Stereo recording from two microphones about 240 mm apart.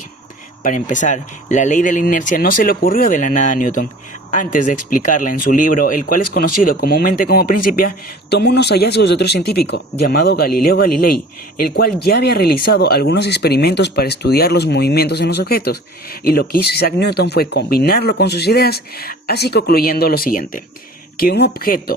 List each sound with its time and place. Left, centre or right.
0.6 s speech: left